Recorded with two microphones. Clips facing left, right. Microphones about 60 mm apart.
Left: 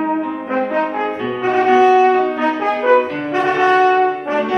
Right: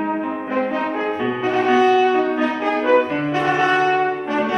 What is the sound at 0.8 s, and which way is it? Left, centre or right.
Brass instrument, left.